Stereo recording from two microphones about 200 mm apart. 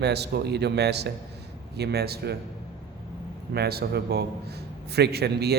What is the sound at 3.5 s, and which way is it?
A man's voice, 50° right (ahead or behind).